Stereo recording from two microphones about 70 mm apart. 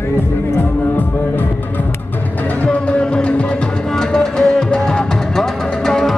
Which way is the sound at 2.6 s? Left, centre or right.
Centre.